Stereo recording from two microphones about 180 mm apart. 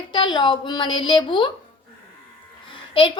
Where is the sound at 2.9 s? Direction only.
25° left (ahead or behind).